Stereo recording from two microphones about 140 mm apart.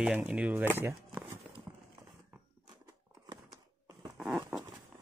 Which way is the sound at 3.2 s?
30° right (ahead or behind).